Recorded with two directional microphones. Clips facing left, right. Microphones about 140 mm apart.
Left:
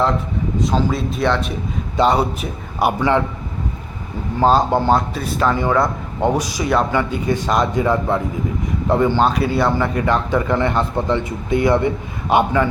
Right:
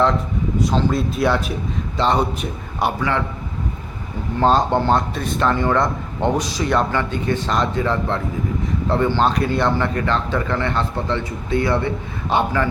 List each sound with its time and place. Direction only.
0.6 s speech: centre (ahead or behind)
2.0 s a man's voice: 10° left (ahead or behind)
4.4 s a man's voice: 5° left (ahead or behind)